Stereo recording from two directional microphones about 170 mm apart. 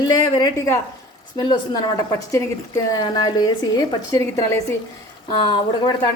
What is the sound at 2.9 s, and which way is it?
A woman's voice, 25° left (ahead or behind).